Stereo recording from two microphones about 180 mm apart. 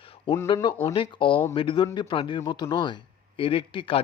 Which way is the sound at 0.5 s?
20° left (ahead or behind).